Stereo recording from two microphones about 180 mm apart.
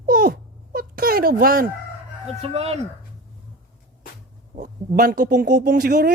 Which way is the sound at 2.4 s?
35° right (ahead or behind).